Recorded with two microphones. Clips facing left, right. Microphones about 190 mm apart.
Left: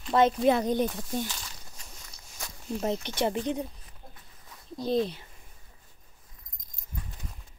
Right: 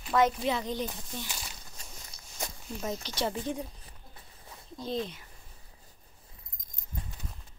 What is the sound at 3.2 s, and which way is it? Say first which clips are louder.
Speech: left 4 dB; 20° left (ahead or behind).